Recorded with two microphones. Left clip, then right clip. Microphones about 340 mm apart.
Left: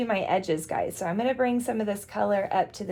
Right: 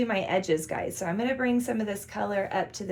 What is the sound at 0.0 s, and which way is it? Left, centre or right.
A woman's voice, centre.